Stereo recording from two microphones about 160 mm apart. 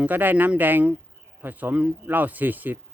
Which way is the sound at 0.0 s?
10° right (ahead or behind).